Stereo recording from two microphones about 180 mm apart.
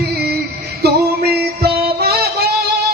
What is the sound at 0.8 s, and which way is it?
Music, 60° right (ahead or behind).